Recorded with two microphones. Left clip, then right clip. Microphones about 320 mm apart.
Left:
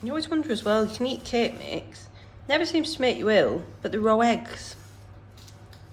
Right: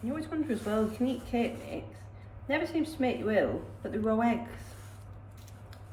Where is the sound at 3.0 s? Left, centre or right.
Centre.